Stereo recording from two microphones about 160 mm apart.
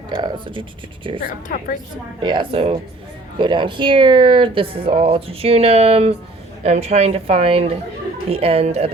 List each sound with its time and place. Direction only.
0.1 s speech: 30° right (ahead or behind)
1.2 s a woman's voice: 55° left (ahead or behind)
2.2 s speech: 30° right (ahead or behind)